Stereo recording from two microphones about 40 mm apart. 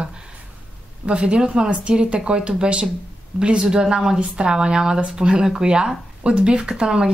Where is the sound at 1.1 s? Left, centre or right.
Right.